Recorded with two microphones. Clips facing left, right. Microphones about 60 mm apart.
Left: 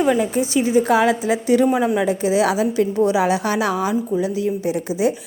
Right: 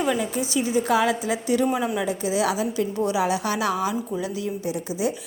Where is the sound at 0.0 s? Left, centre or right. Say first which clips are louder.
Left 6 dB; left.